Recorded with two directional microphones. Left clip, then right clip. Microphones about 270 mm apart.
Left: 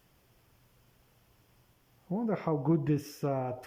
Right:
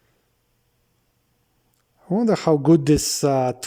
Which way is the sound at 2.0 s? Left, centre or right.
Right.